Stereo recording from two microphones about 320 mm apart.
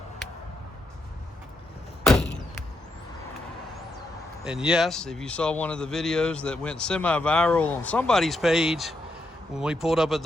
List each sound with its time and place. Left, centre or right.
4.4 s a man's voice: centre